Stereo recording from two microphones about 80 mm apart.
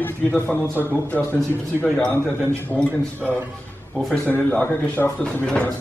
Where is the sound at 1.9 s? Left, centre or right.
Centre.